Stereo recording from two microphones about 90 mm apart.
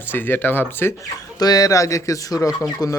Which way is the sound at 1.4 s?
45° left (ahead or behind).